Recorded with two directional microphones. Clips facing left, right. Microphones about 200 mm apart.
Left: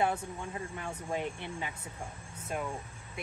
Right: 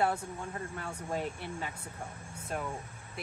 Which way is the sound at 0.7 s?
Centre (ahead or behind).